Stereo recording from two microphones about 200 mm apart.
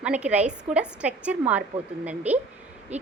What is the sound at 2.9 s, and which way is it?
Hoot, 10° right (ahead or behind).